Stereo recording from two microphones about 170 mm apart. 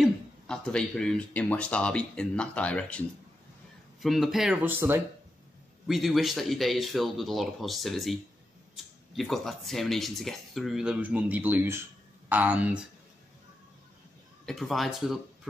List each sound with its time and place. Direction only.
0.0 s speech: 5° left (ahead or behind)
4.0 s speech: centre (ahead or behind)
5.9 s speech: centre (ahead or behind)
14.4 s speech: centre (ahead or behind)